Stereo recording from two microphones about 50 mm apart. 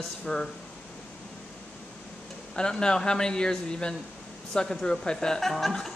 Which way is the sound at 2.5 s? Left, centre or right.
Centre.